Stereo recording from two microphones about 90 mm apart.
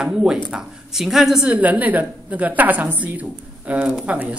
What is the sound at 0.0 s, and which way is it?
A woman's voice, 5° right (ahead or behind).